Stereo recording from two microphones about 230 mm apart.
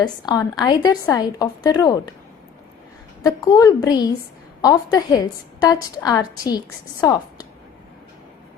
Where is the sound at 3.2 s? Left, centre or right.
Centre.